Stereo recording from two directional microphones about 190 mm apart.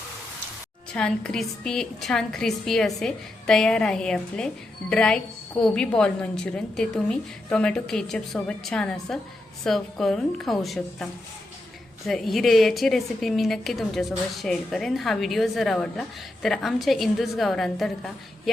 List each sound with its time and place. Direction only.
0.9 s a woman's voice: 5° left (ahead or behind)